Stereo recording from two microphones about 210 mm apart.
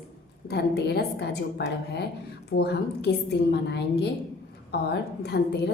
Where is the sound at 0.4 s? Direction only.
50° left (ahead or behind).